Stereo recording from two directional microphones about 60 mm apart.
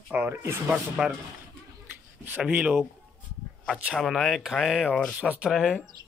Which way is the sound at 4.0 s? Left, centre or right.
Centre.